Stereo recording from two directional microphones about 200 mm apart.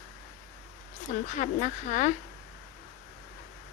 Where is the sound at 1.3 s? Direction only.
35° left (ahead or behind).